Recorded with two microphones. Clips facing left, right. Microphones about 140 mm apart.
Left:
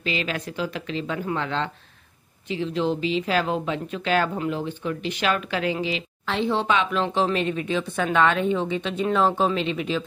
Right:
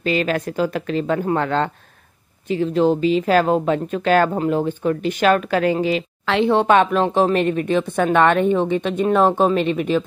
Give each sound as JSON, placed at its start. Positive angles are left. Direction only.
{"t": 0.0, "sound": "speech", "side_deg": -45}
{"t": 6.2, "sound": "speech", "side_deg": -70}